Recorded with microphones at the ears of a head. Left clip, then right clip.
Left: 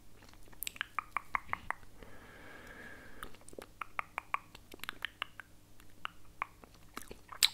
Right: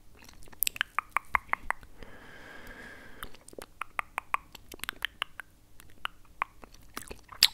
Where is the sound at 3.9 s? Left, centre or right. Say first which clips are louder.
Right 6 dB; right.